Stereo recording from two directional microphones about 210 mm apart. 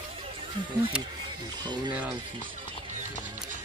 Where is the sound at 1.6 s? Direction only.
20° right (ahead or behind).